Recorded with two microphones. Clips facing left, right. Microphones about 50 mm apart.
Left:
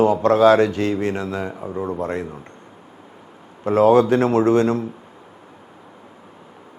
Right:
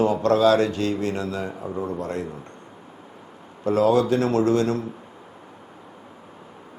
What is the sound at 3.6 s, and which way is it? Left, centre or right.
Speech, left.